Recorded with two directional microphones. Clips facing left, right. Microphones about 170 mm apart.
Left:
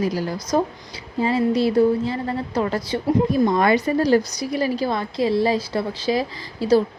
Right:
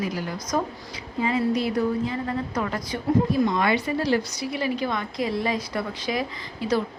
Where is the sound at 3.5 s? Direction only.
45° left (ahead or behind).